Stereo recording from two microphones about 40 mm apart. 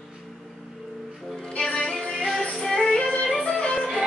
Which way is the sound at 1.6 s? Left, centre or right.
Centre.